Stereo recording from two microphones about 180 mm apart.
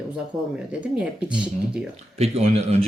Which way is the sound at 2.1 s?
35° right (ahead or behind).